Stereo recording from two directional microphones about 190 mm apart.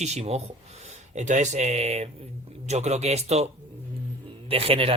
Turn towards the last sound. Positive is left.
turn(degrees=-30)  # may be behind; listen again after turning